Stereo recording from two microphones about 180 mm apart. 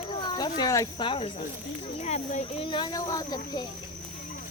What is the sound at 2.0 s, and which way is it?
Speech, 40° left (ahead or behind).